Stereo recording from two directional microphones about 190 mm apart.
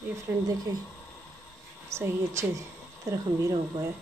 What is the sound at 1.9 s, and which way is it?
A woman's voice, 15° right (ahead or behind).